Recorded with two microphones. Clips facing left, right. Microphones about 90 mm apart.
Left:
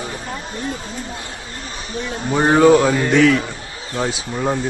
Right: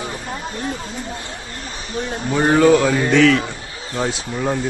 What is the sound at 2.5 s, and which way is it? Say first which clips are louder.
Mantra: left 2 dB; 25° left (ahead or behind).